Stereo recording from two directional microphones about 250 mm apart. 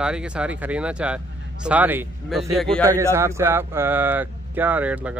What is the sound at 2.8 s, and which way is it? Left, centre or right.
Speech, centre.